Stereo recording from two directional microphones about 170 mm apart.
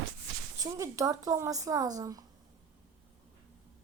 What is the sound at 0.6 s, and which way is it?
Speech, 20° right (ahead or behind).